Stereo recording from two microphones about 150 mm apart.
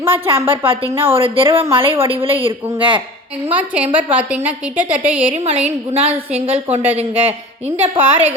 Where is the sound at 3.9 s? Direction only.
10° right (ahead or behind).